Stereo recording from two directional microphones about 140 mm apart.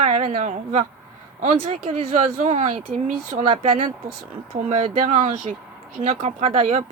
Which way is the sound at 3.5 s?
40° right (ahead or behind).